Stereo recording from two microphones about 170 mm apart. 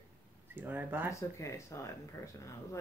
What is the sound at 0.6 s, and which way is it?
Speech, 10° right (ahead or behind).